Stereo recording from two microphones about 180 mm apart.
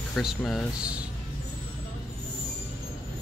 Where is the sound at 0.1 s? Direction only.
Centre (ahead or behind).